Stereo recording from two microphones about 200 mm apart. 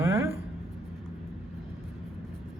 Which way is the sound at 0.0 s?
15° right (ahead or behind).